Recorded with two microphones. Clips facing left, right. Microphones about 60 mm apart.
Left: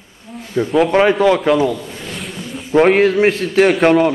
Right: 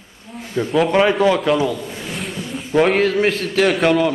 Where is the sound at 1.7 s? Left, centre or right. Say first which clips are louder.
Left 1 dB; centre.